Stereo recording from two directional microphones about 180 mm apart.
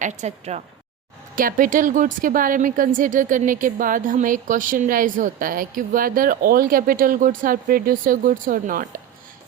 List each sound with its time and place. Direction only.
0.0 s speech: 40° right (ahead or behind)
1.4 s a woman's voice: 50° right (ahead or behind)